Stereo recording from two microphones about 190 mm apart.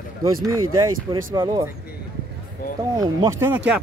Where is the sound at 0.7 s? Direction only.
20° right (ahead or behind).